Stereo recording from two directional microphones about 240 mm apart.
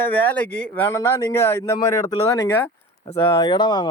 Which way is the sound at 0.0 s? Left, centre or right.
Centre.